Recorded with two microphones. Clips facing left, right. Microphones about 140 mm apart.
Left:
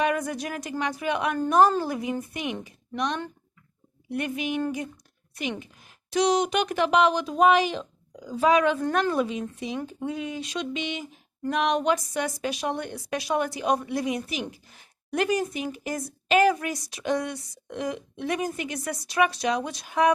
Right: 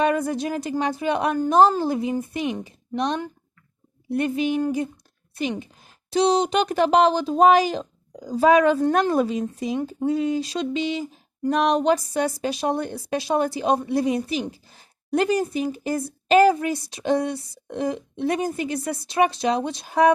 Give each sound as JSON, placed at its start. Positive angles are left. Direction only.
{"t": 0.0, "sound": "a woman's voice", "side_deg": -30}